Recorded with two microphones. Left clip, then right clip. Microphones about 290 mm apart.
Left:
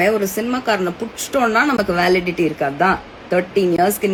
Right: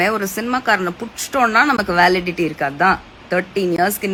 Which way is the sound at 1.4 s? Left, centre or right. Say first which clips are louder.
Right 2 dB; centre.